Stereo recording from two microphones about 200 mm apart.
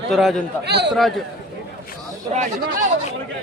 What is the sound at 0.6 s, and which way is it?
Speech, 55° right (ahead or behind).